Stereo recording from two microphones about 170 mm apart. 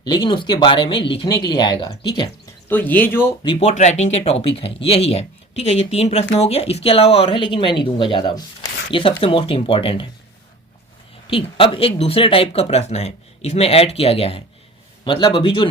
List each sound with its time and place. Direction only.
0.0 s speech: 25° left (ahead or behind)
2.6 s speech: 10° left (ahead or behind)
3.4 s speech: 35° left (ahead or behind)
11.3 s speech: 30° left (ahead or behind)